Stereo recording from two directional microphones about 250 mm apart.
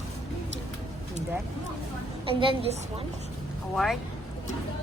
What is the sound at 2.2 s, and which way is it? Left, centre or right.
Speech, right.